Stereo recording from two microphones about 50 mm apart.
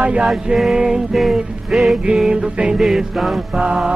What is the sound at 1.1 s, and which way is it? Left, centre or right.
Music, centre.